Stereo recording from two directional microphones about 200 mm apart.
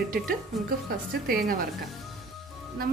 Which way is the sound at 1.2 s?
50° right (ahead or behind).